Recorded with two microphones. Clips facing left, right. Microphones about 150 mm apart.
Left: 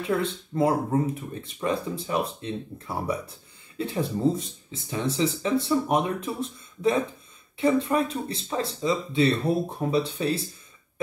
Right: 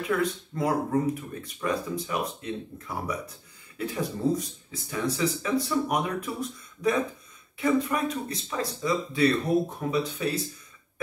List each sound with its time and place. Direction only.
0.0 s speech: 30° left (ahead or behind)